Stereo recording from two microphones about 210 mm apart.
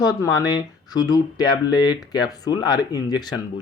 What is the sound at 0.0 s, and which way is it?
Speech, 20° left (ahead or behind).